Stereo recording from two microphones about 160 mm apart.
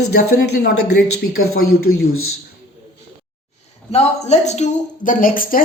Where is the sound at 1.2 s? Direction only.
70° left (ahead or behind).